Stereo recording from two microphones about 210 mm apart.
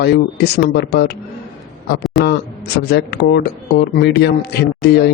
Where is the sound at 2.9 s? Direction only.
50° left (ahead or behind).